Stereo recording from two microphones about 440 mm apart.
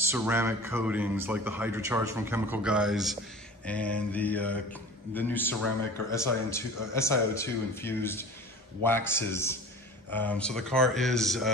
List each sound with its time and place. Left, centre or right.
0.1 s a man's voice: centre